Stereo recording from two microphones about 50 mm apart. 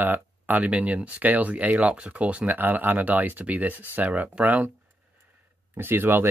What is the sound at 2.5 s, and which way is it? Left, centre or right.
Speech, right.